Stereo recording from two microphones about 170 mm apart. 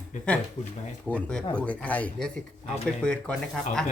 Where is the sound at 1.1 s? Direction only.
5° left (ahead or behind).